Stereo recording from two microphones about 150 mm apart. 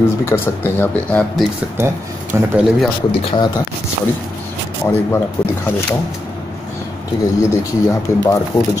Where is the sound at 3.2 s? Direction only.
35° left (ahead or behind).